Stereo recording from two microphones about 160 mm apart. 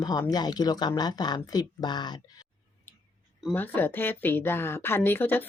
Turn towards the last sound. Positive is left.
turn(degrees=10)  # may be behind; listen again after turning